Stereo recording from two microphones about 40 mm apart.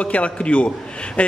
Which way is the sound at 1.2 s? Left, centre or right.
Left.